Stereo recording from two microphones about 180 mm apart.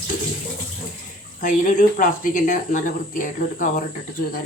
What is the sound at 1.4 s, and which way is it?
Speech, 45° left (ahead or behind).